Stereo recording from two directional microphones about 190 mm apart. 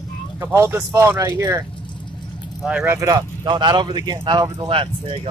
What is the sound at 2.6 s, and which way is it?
Speech, 5° right (ahead or behind).